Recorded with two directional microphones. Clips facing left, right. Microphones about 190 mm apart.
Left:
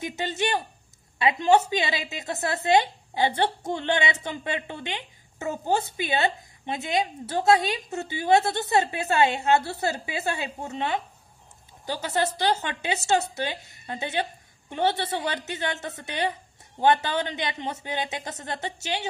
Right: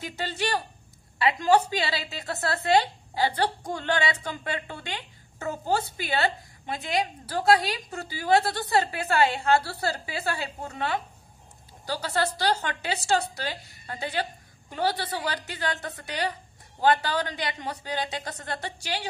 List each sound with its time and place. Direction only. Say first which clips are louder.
0.0 s a woman's voice: left 3 dB; 20° left (ahead or behind)